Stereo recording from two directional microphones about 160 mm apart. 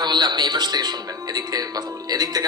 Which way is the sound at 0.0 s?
25° right (ahead or behind).